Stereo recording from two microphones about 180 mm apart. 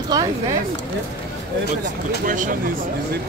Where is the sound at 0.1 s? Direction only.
20° right (ahead or behind).